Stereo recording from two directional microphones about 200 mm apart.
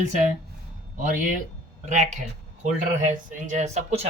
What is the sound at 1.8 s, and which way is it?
Speech, 40° right (ahead or behind).